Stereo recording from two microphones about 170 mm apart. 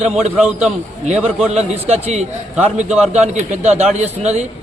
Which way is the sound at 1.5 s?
40° right (ahead or behind).